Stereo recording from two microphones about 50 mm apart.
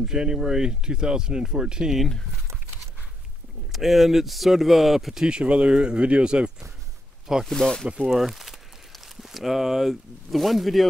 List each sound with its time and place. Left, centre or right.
0.0 s speech: centre
3.7 s speech: centre
5.2 s speech: centre
7.4 s speech: centre
8.1 s speech: centre